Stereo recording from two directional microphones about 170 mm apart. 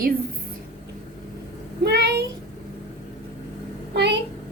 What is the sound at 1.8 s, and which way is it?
Speech, 75° right (ahead or behind).